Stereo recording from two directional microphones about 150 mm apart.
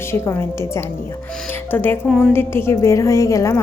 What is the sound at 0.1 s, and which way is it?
Speech, 15° left (ahead or behind).